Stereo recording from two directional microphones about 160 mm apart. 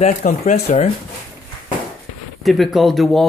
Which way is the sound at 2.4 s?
Centre (ahead or behind).